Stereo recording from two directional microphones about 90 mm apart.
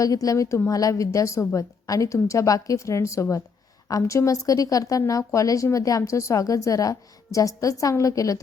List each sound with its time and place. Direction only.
0.0 s speech: 40° left (ahead or behind)